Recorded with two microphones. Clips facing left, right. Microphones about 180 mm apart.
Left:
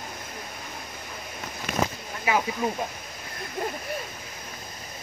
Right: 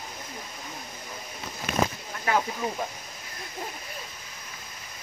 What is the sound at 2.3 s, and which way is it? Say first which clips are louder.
Speech: left 1 dB; 10° left (ahead or behind).